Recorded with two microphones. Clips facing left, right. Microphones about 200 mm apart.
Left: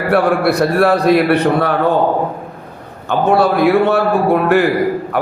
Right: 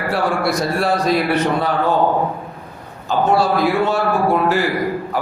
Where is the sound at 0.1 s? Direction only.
60° left (ahead or behind).